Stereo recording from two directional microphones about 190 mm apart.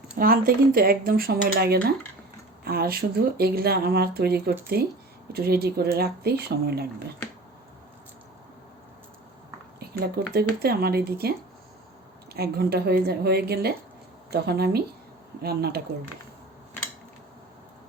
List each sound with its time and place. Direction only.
0.2 s speech: 50° right (ahead or behind)
10.3 s speech: 55° right (ahead or behind)